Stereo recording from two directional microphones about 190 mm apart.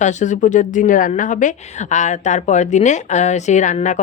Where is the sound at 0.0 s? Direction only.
40° left (ahead or behind).